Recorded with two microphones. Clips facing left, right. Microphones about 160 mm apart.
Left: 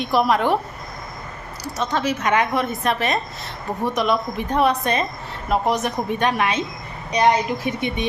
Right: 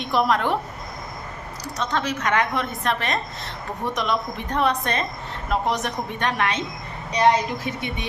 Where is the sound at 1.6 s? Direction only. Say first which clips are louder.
Left 3 dB; 5° left (ahead or behind).